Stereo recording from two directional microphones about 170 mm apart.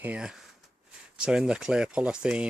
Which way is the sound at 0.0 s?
5° right (ahead or behind).